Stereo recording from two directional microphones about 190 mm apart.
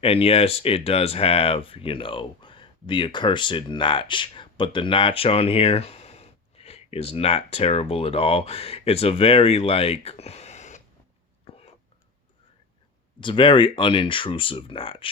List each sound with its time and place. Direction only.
0.0 s speech: 30° left (ahead or behind)
11.4 s whispering: 30° left (ahead or behind)
13.1 s speech: 25° left (ahead or behind)